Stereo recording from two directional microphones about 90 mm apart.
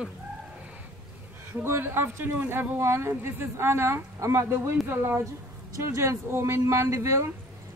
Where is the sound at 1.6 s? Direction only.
25° right (ahead or behind).